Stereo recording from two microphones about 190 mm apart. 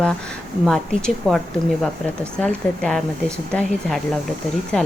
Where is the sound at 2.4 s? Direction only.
5° left (ahead or behind).